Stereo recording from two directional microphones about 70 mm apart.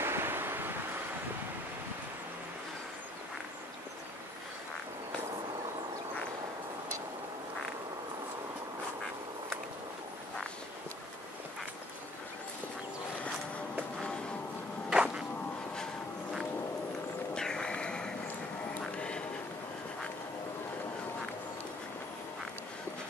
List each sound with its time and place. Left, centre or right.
0.0 s waves: right
14.9 s music: centre
17.4 s a sound: centre
18.9 s music: centre